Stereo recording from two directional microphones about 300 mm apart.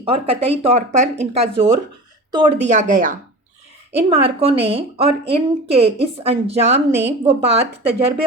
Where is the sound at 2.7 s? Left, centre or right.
Right.